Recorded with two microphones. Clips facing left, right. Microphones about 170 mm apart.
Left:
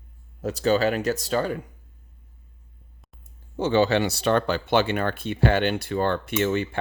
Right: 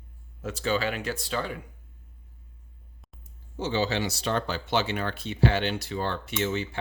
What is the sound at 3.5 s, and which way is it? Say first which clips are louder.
Speech: left 7 dB; 60° left (ahead or behind).